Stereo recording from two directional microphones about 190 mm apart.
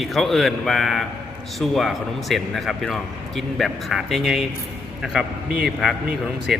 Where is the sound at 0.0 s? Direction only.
Centre (ahead or behind).